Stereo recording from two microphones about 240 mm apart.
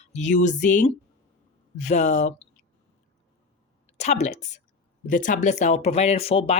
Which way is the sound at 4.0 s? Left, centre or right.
Left.